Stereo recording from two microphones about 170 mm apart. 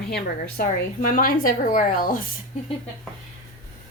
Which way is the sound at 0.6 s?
55° left (ahead or behind).